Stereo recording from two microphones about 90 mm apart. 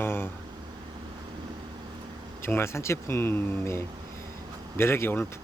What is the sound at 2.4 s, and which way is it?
Speech, 25° left (ahead or behind).